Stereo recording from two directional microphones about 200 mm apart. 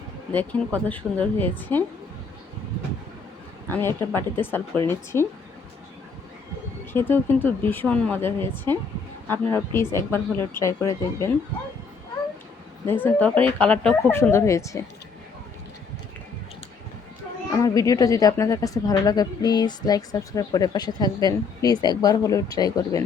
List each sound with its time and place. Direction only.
0.3 s a woman's voice: 10° left (ahead or behind)
3.7 s a woman's voice: 10° left (ahead or behind)
6.9 s a woman's voice: 10° left (ahead or behind)
12.8 s a woman's voice: 10° left (ahead or behind)
17.5 s a woman's voice: 15° left (ahead or behind)